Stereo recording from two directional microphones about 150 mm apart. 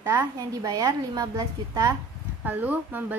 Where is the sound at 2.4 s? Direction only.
10° right (ahead or behind).